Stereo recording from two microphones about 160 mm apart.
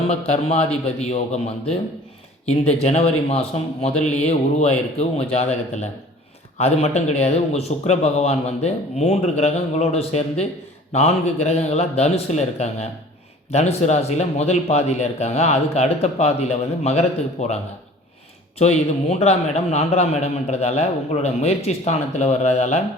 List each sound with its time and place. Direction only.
1.1 s a man's voice: 40° left (ahead or behind)
2.8 s a man's voice: 40° left (ahead or behind)
18.6 s a man's voice: 45° left (ahead or behind)